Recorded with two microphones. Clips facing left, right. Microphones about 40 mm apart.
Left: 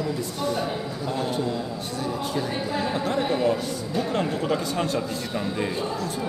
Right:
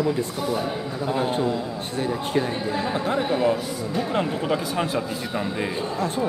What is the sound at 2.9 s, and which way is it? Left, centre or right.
Speech, centre.